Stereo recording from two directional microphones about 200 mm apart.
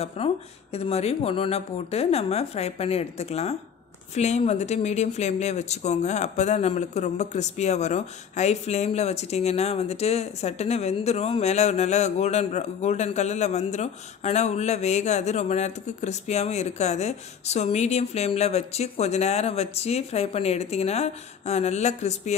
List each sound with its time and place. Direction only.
0.2 s speech: 30° left (ahead or behind)